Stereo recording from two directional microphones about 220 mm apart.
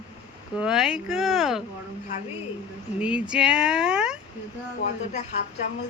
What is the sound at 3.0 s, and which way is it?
Speech, 5° right (ahead or behind).